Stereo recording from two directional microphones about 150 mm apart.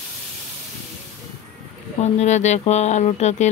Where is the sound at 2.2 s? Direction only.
50° left (ahead or behind).